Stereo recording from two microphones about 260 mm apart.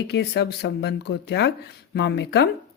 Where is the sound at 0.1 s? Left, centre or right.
Left.